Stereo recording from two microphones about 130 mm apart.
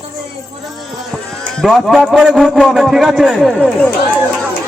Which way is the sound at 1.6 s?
Centre (ahead or behind).